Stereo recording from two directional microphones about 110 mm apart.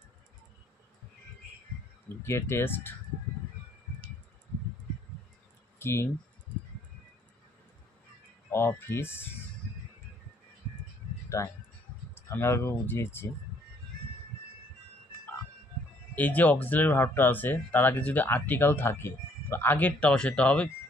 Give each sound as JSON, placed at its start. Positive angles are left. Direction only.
{"t": 2.2, "sound": "speech", "side_deg": 25}
{"t": 5.8, "sound": "typing", "side_deg": 20}
{"t": 8.5, "sound": "speech", "side_deg": 20}
{"t": 11.2, "sound": "speech", "side_deg": 25}
{"t": 16.2, "sound": "speech", "side_deg": 15}